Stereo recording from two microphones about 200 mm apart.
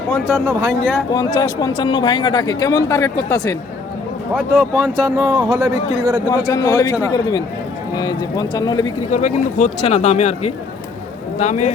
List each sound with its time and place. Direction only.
0.1 s speech: 5° right (ahead or behind)
1.1 s speech: 20° left (ahead or behind)
4.4 s speech: centre (ahead or behind)
5.1 s speech: 15° right (ahead or behind)
6.2 s a man's voice: 20° left (ahead or behind)
9.1 s speech: 40° left (ahead or behind)